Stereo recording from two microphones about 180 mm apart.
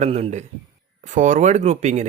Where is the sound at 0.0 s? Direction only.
35° right (ahead or behind).